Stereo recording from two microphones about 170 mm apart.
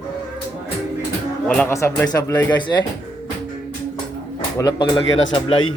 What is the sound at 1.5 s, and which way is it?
Speech, 10° left (ahead or behind).